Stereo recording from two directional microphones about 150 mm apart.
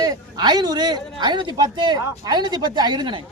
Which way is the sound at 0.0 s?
25° right (ahead or behind).